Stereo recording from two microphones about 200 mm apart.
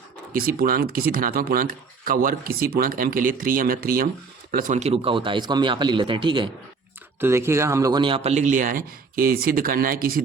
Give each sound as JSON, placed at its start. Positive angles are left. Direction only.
{"t": 0.3, "sound": "speech", "side_deg": -45}
{"t": 7.2, "sound": "a man's voice", "side_deg": -15}